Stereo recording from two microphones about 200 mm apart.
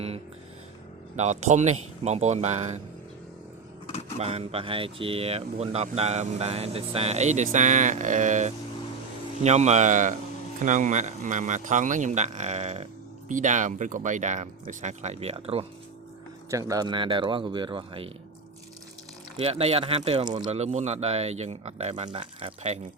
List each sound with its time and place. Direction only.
1.1 s speech: 35° right (ahead or behind)
4.2 s speech: 30° right (ahead or behind)
16.5 s speech: 15° right (ahead or behind)
19.4 s speech: 30° right (ahead or behind)
20.5 s speech: 30° right (ahead or behind)